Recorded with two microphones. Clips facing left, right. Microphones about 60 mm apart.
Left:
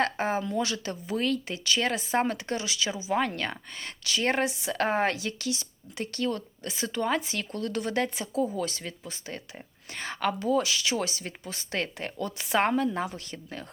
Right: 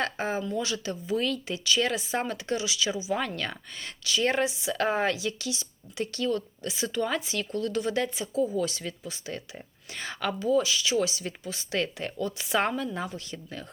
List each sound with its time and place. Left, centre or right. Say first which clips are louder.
0.0 s a sound: left 2 dB; left
0.4 s speech: left 1 dB; left
3.8 s speech: right 3 dB; left
10.4 s speech: right 4 dB; left